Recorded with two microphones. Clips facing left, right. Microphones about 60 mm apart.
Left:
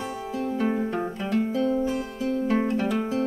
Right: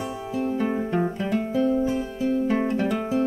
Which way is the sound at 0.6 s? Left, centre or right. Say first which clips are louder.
Even; centre.